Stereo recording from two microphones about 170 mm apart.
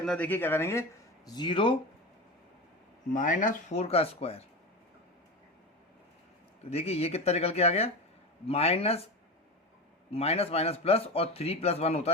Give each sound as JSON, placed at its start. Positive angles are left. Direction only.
{"t": 0.0, "sound": "speech", "side_deg": 5}
{"t": 3.1, "sound": "speech", "side_deg": 50}
{"t": 6.7, "sound": "speech", "side_deg": 35}
{"t": 10.1, "sound": "speech", "side_deg": 35}